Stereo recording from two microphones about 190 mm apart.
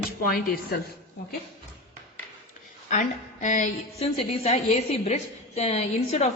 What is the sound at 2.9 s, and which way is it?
A woman's voice, 40° left (ahead or behind).